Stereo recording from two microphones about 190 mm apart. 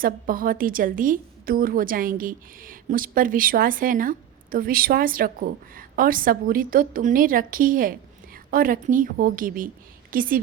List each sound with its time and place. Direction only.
0.0 s a woman's voice: 50° right (ahead or behind)